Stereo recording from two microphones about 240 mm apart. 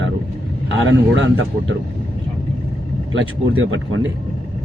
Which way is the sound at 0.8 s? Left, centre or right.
Right.